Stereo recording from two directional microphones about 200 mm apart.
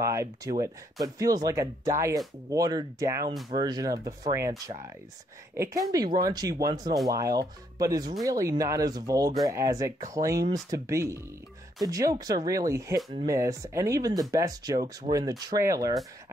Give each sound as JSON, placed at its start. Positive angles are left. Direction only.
{"t": 0.0, "sound": "speech", "side_deg": -15}